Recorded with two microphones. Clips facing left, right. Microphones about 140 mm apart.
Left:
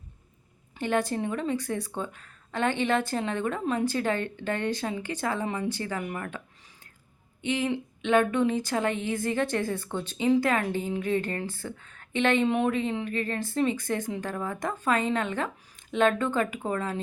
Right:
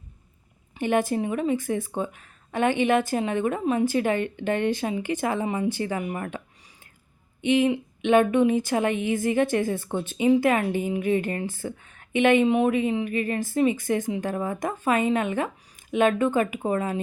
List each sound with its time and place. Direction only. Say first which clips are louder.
0.8 s speech: right 4 dB; 15° right (ahead or behind)
7.4 s speech: right 7 dB; 15° right (ahead or behind)